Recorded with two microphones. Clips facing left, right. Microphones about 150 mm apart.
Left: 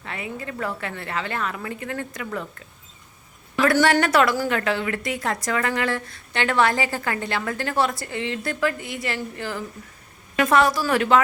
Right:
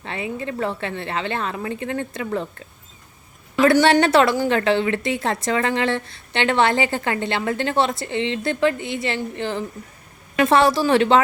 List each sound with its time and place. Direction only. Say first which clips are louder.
0.0 s a woman's voice: right 5 dB; 25° right (ahead or behind)